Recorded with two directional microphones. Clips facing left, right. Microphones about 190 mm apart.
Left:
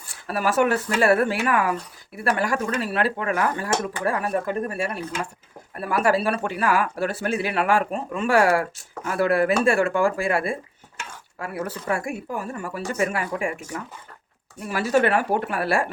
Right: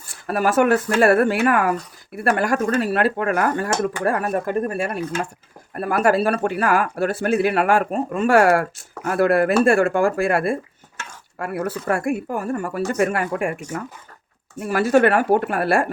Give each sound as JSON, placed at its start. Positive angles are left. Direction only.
{"t": 0.3, "sound": "speech", "side_deg": -50}
{"t": 5.7, "sound": "speech", "side_deg": -45}